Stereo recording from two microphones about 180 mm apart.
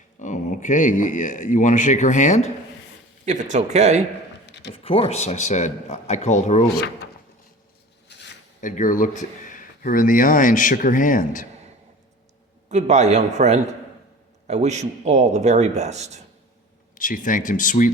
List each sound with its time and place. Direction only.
0.2 s speech: 45° left (ahead or behind)
3.2 s a man's voice: 40° right (ahead or behind)
4.4 s a sound: 75° left (ahead or behind)
4.7 s speech: 30° left (ahead or behind)
8.0 s a sound: 70° left (ahead or behind)
8.6 s speech: 45° left (ahead or behind)
12.6 s a man's voice: 40° right (ahead or behind)
16.9 s speech: 50° left (ahead or behind)